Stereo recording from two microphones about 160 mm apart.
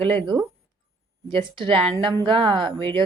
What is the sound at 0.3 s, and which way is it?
A woman's voice, 20° right (ahead or behind).